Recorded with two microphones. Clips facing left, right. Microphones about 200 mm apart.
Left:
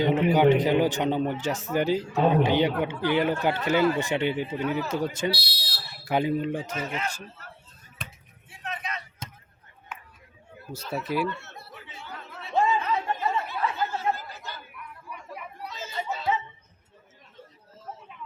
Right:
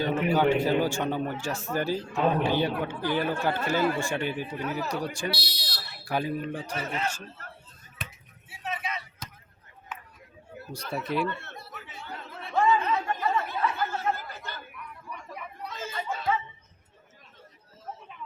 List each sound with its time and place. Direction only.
0.0 s a man's voice: 20° left (ahead or behind)
5.4 s fire alarm: 10° left (ahead or behind)
6.1 s a man's voice: 20° left (ahead or behind)
8.4 s vehicle: 5° right (ahead or behind)
9.2 s a sound: 25° left (ahead or behind)
10.9 s speech: 5° left (ahead or behind)
12.5 s chatter: 25° left (ahead or behind)
14.3 s chatter: 55° right (ahead or behind)
14.8 s chatter: 5° left (ahead or behind)
15.7 s chatter: 50° right (ahead or behind)